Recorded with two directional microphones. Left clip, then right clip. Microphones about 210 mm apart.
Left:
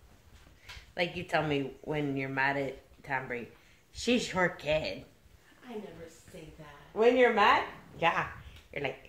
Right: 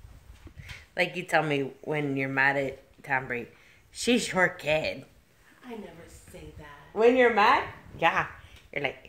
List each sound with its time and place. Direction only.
0.9 s speech: 55° right (ahead or behind)
6.9 s speech: 50° right (ahead or behind)